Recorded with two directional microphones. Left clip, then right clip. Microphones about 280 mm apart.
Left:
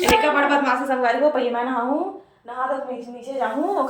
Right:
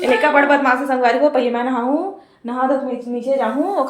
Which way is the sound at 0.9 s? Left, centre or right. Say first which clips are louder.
Right 4 dB; right.